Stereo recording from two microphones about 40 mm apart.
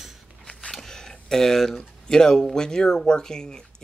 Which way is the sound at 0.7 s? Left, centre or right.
Centre.